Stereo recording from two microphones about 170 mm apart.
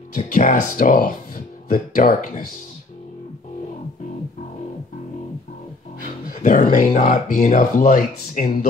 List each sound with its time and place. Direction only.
0.3 s speech: 45° left (ahead or behind)
5.9 s speech: 50° left (ahead or behind)